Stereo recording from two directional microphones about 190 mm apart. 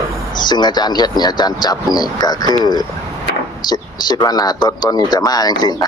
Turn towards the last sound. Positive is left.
turn(degrees=20)  # may be behind; listen again after turning